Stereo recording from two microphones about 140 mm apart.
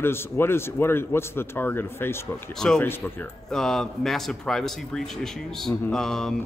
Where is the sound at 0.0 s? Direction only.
15° left (ahead or behind).